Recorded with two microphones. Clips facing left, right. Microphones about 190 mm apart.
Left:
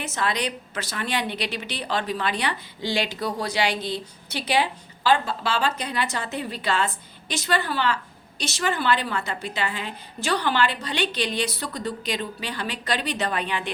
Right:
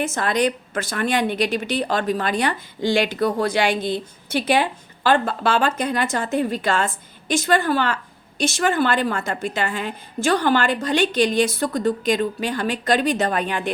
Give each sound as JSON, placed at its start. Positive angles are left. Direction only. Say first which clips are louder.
{"t": 0.0, "sound": "a woman's voice", "louder": "right 6 dB", "side_deg": -50}